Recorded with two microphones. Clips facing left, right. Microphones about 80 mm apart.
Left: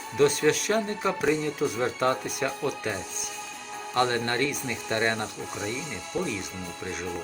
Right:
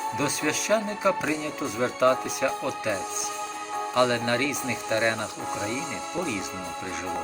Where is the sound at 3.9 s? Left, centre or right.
Centre.